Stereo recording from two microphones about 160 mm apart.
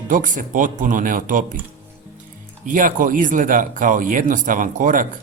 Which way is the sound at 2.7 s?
60° right (ahead or behind).